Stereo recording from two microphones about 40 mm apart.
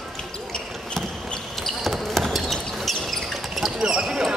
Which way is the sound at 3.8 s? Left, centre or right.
Centre.